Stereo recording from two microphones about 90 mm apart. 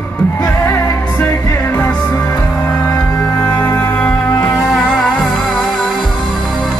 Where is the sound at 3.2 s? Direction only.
20° left (ahead or behind).